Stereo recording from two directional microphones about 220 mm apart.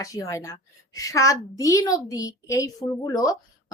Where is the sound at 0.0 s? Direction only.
15° left (ahead or behind).